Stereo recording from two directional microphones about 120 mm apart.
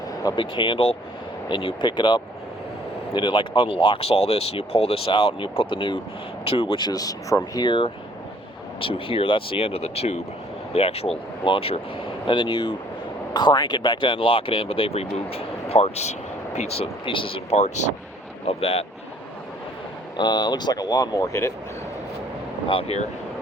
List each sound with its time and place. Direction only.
0.2 s speech: 40° left (ahead or behind)
7.6 s speech: 45° left (ahead or behind)
17.6 s speech: 75° left (ahead or behind)
18.4 s speech: 55° left (ahead or behind)
20.1 s speech: 35° left (ahead or behind)
22.7 s speech: 55° left (ahead or behind)